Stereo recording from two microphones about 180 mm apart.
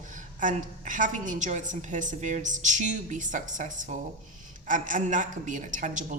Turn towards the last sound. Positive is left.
turn(degrees=-45)  # may be behind; listen again after turning